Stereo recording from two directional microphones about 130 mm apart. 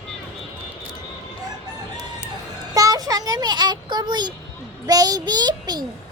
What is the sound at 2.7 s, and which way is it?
A child's voice, 30° right (ahead or behind).